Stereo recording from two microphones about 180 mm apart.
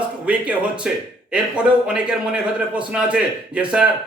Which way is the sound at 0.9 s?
5° right (ahead or behind).